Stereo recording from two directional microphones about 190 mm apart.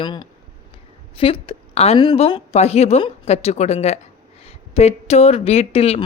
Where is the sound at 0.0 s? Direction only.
25° left (ahead or behind).